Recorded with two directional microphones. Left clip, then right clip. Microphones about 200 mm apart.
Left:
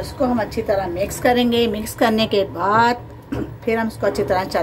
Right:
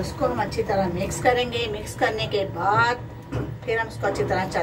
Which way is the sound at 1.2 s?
60° left (ahead or behind).